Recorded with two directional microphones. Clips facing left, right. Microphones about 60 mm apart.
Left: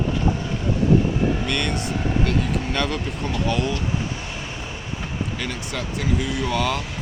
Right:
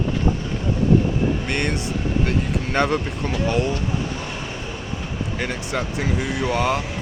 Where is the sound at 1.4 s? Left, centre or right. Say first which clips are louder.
Right 1 dB; right.